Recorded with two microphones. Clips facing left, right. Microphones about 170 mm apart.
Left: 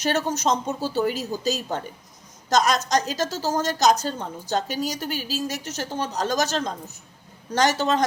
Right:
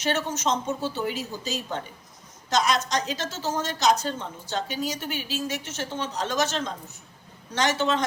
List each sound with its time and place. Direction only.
0.0 s a woman's voice: 40° left (ahead or behind)